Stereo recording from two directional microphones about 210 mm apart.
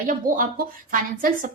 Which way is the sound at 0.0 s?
40° right (ahead or behind).